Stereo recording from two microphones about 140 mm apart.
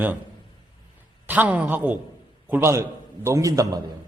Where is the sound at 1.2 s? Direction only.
10° right (ahead or behind).